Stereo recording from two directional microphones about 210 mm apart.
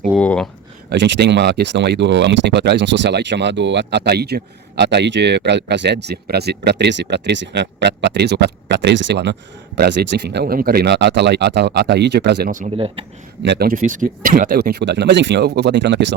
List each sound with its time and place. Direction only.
0.2 s a sound: 5° left (ahead or behind)
0.9 s speech: 60° right (ahead or behind)
12.7 s speech: 25° right (ahead or behind)
13.4 s speech: 50° right (ahead or behind)